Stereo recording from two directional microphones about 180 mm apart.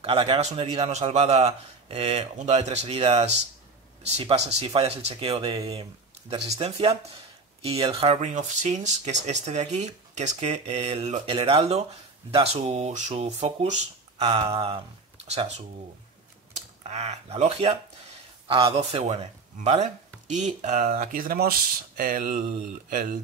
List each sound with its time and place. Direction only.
0.0 s speech: 30° right (ahead or behind)
4.6 s speech: 30° right (ahead or behind)
6.3 s speech: 35° right (ahead or behind)
16.5 s speech: 35° right (ahead or behind)